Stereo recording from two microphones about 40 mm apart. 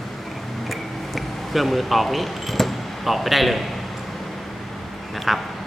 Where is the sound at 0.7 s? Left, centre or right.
Centre.